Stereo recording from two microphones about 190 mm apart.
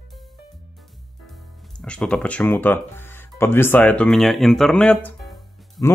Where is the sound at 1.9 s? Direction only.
5° left (ahead or behind).